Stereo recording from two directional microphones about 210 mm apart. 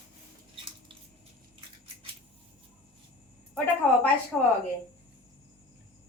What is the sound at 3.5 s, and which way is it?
Speech, 5° left (ahead or behind).